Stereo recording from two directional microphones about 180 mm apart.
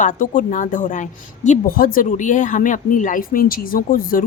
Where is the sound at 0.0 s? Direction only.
45° left (ahead or behind).